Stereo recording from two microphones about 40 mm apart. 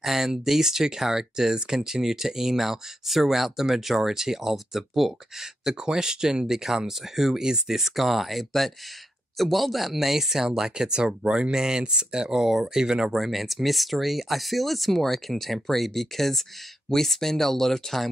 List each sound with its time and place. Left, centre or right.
0.0 s speech: centre
13.1 s speech: centre